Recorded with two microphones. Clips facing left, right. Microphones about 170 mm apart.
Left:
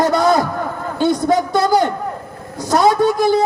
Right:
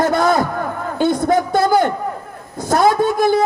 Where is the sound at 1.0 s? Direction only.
55° right (ahead or behind).